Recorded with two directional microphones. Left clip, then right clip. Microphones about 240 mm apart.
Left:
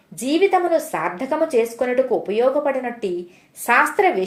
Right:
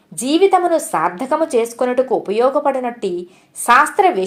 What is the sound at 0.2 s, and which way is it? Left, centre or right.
A woman's voice, right.